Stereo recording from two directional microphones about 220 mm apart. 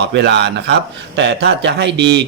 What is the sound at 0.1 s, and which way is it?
Speech, 50° right (ahead or behind).